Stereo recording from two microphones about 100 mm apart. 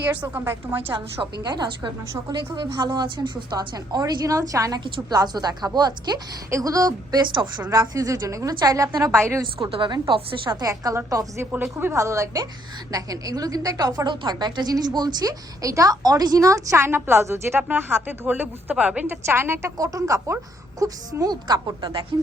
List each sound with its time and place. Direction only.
0.0 s a woman's voice: 15° right (ahead or behind)
1.4 s a woman's voice: 45° right (ahead or behind)
4.8 s a woman's voice: 45° right (ahead or behind)
7.3 s a woman's voice: 50° right (ahead or behind)
7.7 s a woman's voice: 35° right (ahead or behind)
9.6 s speech: 65° right (ahead or behind)
10.6 s a woman's voice: 40° right (ahead or behind)
19.7 s a woman's voice: 35° right (ahead or behind)